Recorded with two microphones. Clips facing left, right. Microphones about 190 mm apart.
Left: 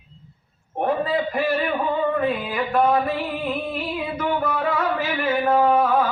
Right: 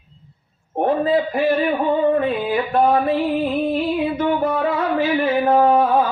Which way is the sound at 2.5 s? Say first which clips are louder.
Right 3 dB; 30° right (ahead or behind).